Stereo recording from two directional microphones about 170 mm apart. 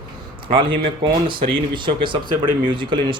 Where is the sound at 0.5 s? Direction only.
30° right (ahead or behind).